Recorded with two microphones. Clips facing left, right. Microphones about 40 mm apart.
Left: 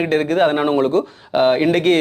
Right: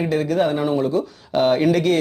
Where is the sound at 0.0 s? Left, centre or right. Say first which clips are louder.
Left 4 dB; left.